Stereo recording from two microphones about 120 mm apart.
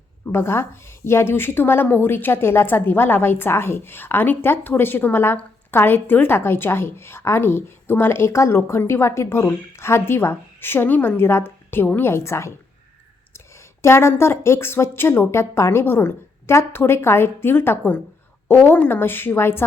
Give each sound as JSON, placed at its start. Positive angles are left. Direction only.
{"t": 0.3, "sound": "a woman's voice", "side_deg": 20}